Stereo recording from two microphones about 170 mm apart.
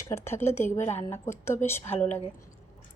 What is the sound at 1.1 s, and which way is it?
A woman's voice, 15° left (ahead or behind).